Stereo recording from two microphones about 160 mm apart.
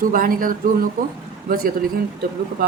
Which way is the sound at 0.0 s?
60° right (ahead or behind).